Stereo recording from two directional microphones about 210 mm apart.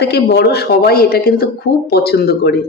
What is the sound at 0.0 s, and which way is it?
A woman's voice, 55° left (ahead or behind).